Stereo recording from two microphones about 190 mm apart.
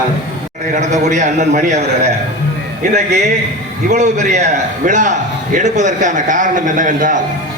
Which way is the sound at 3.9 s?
40° right (ahead or behind).